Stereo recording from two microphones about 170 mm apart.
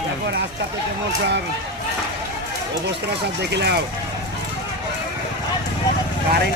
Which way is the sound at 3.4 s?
85° right.